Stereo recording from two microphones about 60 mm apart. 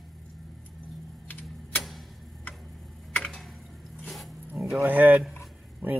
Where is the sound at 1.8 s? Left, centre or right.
Centre.